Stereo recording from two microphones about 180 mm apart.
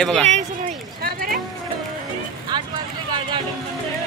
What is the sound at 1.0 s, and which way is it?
Run, 55° right (ahead or behind).